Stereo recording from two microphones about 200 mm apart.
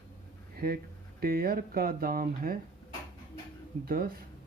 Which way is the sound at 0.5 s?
50° right (ahead or behind).